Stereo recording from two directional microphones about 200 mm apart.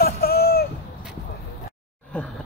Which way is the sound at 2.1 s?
5° left (ahead or behind).